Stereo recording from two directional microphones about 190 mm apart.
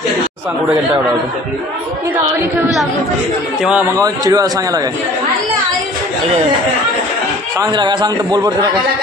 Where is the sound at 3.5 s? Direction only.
5° right (ahead or behind).